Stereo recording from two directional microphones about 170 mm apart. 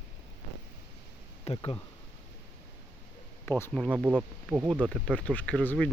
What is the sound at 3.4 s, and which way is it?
Speech, 15° left (ahead or behind).